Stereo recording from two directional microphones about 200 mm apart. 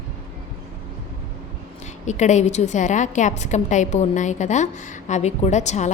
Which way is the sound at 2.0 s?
35° left (ahead or behind).